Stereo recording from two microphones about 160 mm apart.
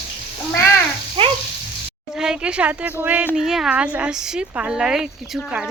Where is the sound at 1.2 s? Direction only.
35° right (ahead or behind).